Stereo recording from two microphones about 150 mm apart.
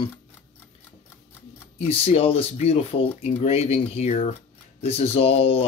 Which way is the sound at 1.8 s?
40° left (ahead or behind).